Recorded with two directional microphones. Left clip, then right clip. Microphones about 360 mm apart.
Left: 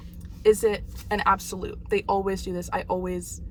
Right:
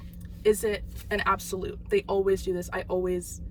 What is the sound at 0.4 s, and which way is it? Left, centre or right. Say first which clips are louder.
Speech: left 4 dB; centre.